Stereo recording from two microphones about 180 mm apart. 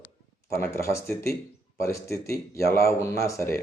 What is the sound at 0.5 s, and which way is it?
A man's voice, 15° left (ahead or behind).